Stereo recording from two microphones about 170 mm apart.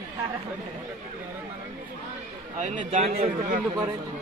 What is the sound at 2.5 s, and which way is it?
A man's voice, 40° right (ahead or behind).